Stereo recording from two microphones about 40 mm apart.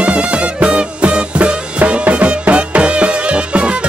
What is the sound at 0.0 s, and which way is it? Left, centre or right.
Music, right.